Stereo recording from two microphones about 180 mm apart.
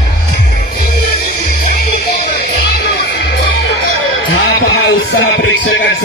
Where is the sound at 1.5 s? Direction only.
50° left (ahead or behind).